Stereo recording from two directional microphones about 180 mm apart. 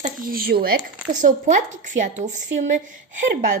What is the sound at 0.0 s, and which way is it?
Speech, 50° right (ahead or behind).